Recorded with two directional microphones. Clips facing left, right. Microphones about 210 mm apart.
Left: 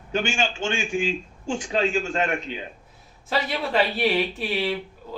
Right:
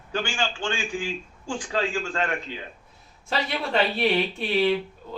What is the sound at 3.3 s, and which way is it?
Speech, centre (ahead or behind).